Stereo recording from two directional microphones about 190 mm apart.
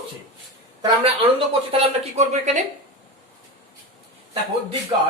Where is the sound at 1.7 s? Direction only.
35° right (ahead or behind).